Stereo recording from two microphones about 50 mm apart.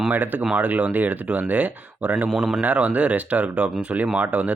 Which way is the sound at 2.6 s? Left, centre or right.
Right.